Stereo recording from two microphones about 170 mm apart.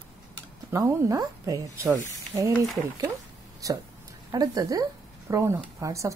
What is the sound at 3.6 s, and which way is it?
Speech, 20° right (ahead or behind).